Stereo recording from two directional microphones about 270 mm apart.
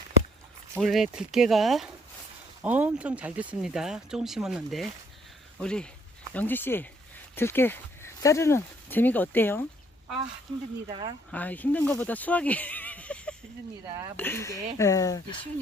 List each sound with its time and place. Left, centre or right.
0.8 s speech: centre
10.8 s speech: centre
11.3 s speech: centre